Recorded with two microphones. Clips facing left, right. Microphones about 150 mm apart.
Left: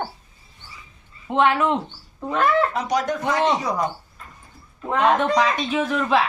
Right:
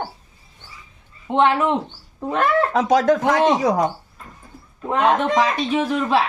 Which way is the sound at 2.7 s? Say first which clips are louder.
Right 7 dB; 90° right.